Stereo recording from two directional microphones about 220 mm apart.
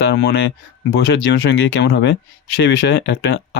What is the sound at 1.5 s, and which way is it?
Speech, 50° left (ahead or behind).